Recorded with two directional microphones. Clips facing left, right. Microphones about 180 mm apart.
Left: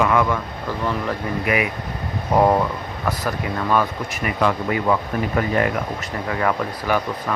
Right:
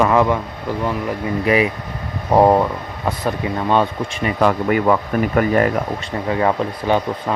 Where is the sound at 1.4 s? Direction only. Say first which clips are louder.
Right 7 dB; 30° right (ahead or behind).